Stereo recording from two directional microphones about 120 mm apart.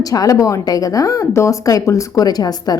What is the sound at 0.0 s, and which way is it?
Speech, 30° left (ahead or behind).